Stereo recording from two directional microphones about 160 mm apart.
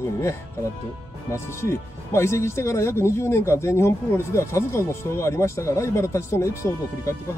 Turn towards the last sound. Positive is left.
turn(degrees=20)  # may be behind; listen again after turning